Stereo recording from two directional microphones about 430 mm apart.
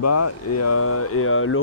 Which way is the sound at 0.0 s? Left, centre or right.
Left.